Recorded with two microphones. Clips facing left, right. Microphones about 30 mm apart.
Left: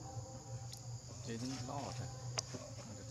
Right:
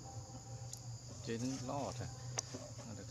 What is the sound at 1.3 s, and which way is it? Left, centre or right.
Cricket, left.